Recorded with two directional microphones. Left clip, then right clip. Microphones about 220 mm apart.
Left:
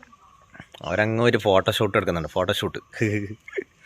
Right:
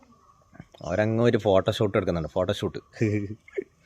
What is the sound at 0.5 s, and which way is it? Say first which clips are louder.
Speech: left 3 dB; centre (ahead or behind).